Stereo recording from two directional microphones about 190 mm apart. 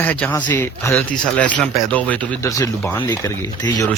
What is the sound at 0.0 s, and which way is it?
Speech, 10° left (ahead or behind).